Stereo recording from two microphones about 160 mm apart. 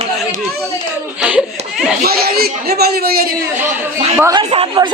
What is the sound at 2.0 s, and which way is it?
Speech, 70° right (ahead or behind).